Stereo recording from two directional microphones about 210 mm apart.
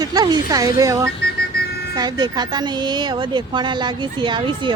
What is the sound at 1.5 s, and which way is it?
Vehicle, 45° left (ahead or behind).